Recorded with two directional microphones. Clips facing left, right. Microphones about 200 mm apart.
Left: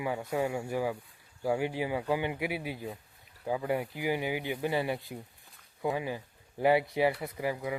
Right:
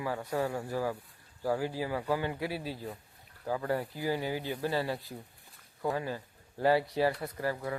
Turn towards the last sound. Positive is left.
turn(degrees=15)  # may be behind; listen again after turning